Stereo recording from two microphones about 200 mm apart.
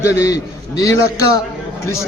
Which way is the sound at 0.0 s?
15° left (ahead or behind).